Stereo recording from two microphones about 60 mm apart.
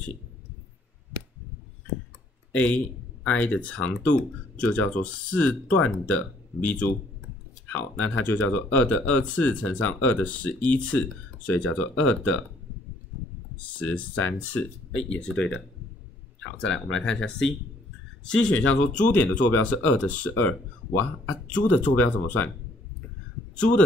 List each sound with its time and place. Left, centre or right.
2.5 s a man's voice: left
11.7 s speech: left
13.7 s speech: left
17.0 s speech: centre; by 22.5 s left
23.5 s speech: centre